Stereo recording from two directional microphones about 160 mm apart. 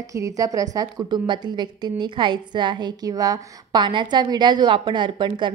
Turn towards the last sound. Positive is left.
turn(degrees=-30)  # may be behind; listen again after turning